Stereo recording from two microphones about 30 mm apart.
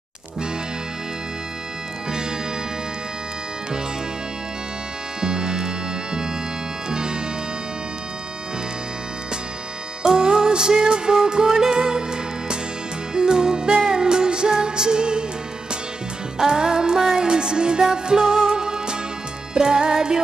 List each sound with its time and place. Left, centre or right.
5.2 s music: right
10.0 s music: right
16.3 s music: right
18.1 s music: centre